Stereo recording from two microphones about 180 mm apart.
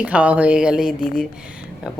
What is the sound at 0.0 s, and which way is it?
A woman's voice, 5° right (ahead or behind).